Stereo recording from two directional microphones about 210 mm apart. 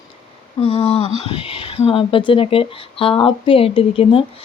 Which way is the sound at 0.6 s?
30° left (ahead or behind).